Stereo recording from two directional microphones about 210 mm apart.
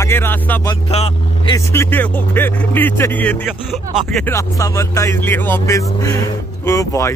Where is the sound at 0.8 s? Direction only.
25° left (ahead or behind).